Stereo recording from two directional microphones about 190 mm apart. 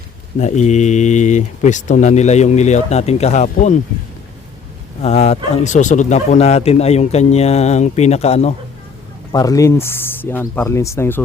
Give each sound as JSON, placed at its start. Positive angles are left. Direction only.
{"t": 0.3, "sound": "speech", "side_deg": 35}
{"t": 5.0, "sound": "speech", "side_deg": 35}
{"t": 9.3, "sound": "speech", "side_deg": 20}